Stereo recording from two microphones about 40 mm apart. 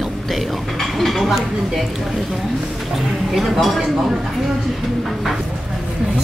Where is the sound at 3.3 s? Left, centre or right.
Centre.